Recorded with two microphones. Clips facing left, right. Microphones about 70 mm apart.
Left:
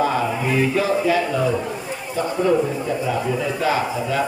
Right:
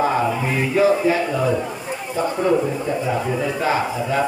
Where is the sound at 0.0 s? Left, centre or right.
Right.